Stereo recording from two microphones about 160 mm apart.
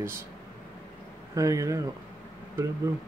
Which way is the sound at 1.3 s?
20° right (ahead or behind).